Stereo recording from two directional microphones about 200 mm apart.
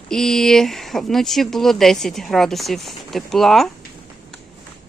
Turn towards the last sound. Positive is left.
turn(degrees=0)  # may be behind; listen again after turning